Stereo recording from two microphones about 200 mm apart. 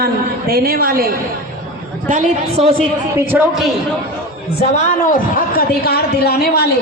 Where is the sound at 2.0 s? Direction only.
35° right (ahead or behind).